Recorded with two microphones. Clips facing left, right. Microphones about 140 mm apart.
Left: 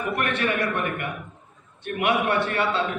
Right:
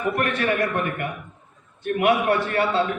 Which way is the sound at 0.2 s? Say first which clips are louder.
Even; 40° right (ahead or behind).